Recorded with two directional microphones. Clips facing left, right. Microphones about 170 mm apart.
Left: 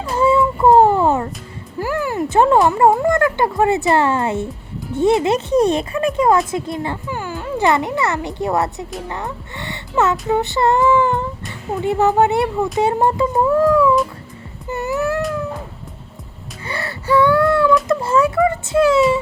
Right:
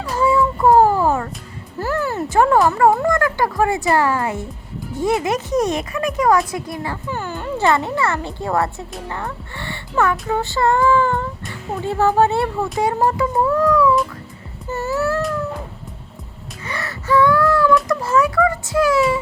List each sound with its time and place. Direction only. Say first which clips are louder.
0.0 s a sound: left 2 dB; 25° left (ahead or behind)
2.6 s speech: left 1 dB; 20° left (ahead or behind)
7.1 s music: even; 10° left (ahead or behind)
7.6 s speech: left 1 dB; 15° left (ahead or behind)
14.7 s music: even; 15° left (ahead or behind)
16.6 s wail: left 2 dB; 30° left (ahead or behind)
17.8 s music: left 2 dB; 30° left (ahead or behind)